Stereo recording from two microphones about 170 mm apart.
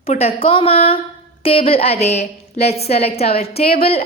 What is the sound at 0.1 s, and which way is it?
A woman's voice, 35° left (ahead or behind).